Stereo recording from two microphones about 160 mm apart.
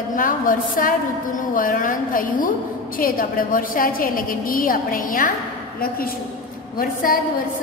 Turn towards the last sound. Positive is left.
turn(degrees=65)  # may be behind; listen again after turning